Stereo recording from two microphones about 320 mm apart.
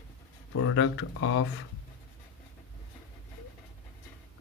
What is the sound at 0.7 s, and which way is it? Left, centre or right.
Speech, left.